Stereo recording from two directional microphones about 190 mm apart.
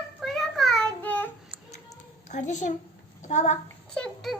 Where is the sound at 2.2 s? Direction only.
40° left (ahead or behind).